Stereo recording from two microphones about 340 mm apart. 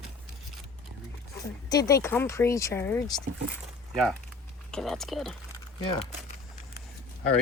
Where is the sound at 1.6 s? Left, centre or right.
Centre.